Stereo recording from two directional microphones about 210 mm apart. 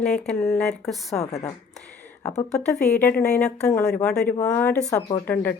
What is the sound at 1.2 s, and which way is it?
Speech, 30° left (ahead or behind).